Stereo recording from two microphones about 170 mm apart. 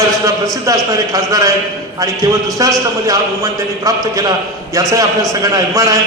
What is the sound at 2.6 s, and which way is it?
A man's voice, 20° right (ahead or behind).